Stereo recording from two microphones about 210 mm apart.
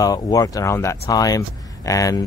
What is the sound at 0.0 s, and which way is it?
Speech, 15° left (ahead or behind).